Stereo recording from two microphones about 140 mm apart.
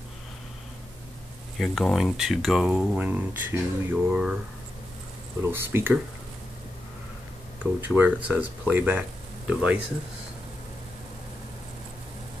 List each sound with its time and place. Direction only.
1.6 s speech: centre (ahead or behind)
5.4 s speech: 15° right (ahead or behind)
7.9 s speech: 10° right (ahead or behind)